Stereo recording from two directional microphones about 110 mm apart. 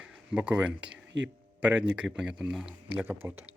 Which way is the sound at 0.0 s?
10° right (ahead or behind).